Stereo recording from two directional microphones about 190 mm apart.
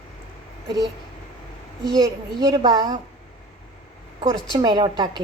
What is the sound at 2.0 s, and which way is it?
A child's voice, 20° right (ahead or behind).